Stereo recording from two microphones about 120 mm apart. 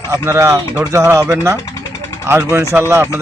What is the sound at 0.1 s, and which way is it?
Speech, 25° right (ahead or behind).